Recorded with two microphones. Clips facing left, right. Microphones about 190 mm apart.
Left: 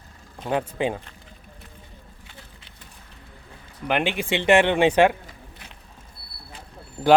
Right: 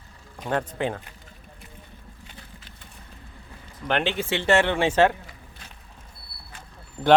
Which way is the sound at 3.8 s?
10° left (ahead or behind).